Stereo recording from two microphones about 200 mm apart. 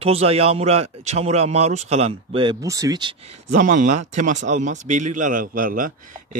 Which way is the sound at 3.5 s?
40° right (ahead or behind).